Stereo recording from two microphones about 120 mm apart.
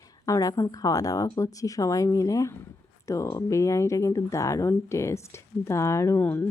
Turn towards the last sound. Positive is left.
turn(degrees=15)  # may be behind; listen again after turning